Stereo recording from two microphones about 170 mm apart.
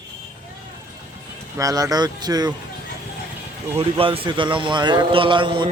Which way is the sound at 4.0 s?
30° right (ahead or behind).